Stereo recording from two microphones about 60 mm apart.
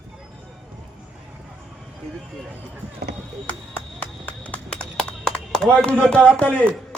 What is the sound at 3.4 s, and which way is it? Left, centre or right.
Clapping, left.